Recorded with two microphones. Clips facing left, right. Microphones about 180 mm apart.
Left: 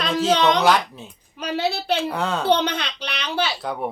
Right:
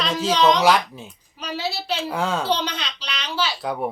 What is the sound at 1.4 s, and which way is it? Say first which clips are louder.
Speech: left 4 dB; 60° left (ahead or behind).